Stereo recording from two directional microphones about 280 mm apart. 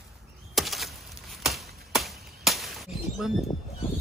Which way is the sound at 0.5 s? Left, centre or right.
Centre.